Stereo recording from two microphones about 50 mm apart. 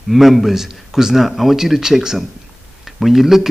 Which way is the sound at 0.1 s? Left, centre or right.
Centre.